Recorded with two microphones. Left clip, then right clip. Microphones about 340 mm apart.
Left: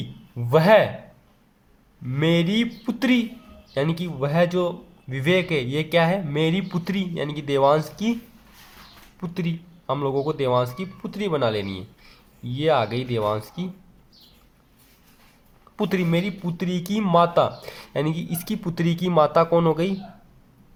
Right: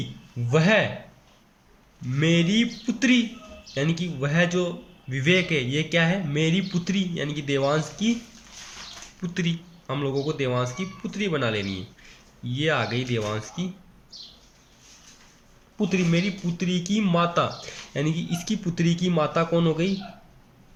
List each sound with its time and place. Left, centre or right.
0.5 s speech: centre
2.1 s speech: centre
9.2 s speech: centre
15.9 s speech: centre